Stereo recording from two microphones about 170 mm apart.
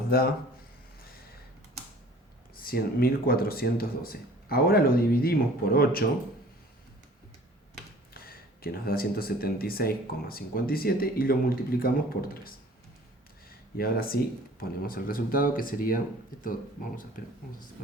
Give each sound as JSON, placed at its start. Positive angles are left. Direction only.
{"t": 2.6, "sound": "speech", "side_deg": 60}
{"t": 8.1, "sound": "speech", "side_deg": 60}
{"t": 13.7, "sound": "speech", "side_deg": 60}
{"t": 17.2, "sound": "speech", "side_deg": 55}